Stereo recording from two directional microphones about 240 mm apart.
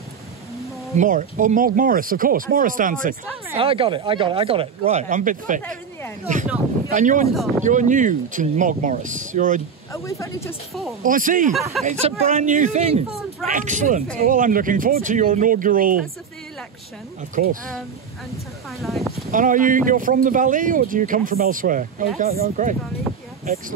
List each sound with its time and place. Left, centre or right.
0.9 s speech: right
3.5 s speech: right
10.0 s speech: centre
11.0 s speech: right
17.4 s speech: right
18.8 s speech: centre
19.3 s speech: right
23.1 s a sound: centre